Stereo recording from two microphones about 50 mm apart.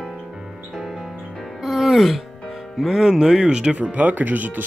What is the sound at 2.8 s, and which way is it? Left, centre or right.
Speech, centre.